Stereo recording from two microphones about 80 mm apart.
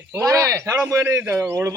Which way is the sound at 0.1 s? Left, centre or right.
Right.